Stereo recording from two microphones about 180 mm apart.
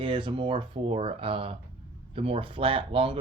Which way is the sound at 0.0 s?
25° right (ahead or behind).